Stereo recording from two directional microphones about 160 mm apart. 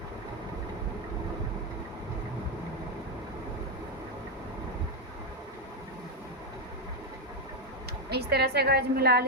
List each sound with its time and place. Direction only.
8.1 s a woman's voice: 90° right